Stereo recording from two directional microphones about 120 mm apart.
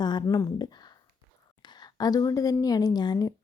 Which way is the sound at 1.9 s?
30° left (ahead or behind).